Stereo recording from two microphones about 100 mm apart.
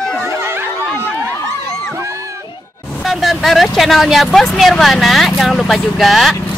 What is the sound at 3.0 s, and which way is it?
Speech, centre (ahead or behind).